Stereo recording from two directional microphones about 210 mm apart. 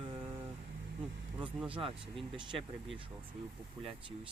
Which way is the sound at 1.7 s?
25° right (ahead or behind).